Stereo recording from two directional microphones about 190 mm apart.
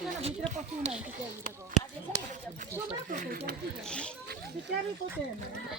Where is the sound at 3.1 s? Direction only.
50° right (ahead or behind).